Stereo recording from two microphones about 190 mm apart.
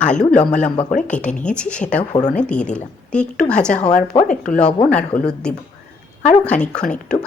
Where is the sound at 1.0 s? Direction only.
5° left (ahead or behind).